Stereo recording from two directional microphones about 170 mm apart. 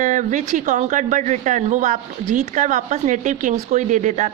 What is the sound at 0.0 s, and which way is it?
Speech, 45° right (ahead or behind).